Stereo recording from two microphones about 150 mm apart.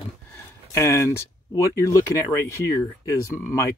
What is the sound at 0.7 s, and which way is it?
Speech, 20° left (ahead or behind).